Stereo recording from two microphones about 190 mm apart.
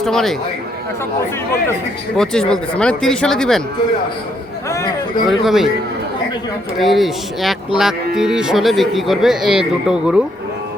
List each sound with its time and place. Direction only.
0.0 s speech: centre (ahead or behind)
2.1 s speech: 5° left (ahead or behind)
4.7 s speech: 15° left (ahead or behind)
5.3 s speech: centre (ahead or behind)
6.7 s speech: centre (ahead or behind)